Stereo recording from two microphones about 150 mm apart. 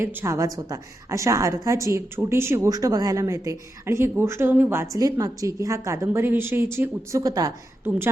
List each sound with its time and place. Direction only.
0.0 s a woman's voice: 15° right (ahead or behind)